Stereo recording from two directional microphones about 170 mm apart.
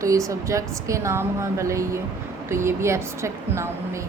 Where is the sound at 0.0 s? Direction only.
20° right (ahead or behind).